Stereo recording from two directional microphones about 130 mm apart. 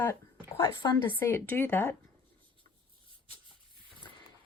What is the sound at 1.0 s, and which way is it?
Speech, 15° left (ahead or behind).